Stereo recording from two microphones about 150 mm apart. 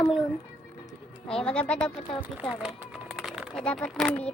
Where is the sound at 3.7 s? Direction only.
5° left (ahead or behind).